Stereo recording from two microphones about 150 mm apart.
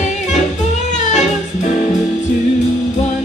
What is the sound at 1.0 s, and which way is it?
Music, 50° left (ahead or behind).